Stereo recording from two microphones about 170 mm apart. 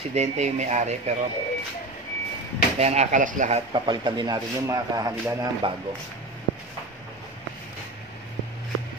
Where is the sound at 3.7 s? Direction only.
25° right (ahead or behind).